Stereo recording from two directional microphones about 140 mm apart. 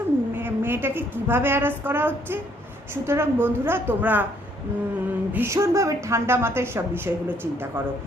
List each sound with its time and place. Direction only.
0.3 s a woman's voice: 15° right (ahead or behind)
5.3 s speech: 20° right (ahead or behind)